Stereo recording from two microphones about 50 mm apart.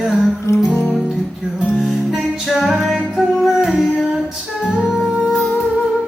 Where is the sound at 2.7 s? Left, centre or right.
Centre.